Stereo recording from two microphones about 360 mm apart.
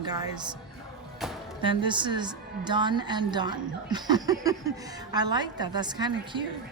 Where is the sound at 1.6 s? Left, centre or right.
Centre.